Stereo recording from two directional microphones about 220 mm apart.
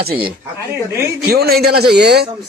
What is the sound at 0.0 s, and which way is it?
Speech, 45° right (ahead or behind).